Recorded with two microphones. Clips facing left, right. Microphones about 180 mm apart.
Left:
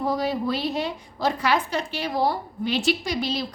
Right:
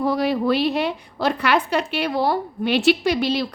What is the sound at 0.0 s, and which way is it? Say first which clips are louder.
A woman's voice: right 4 dB; 70° right (ahead or behind).